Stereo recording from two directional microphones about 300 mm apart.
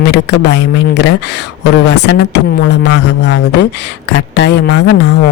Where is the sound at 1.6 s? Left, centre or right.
Left.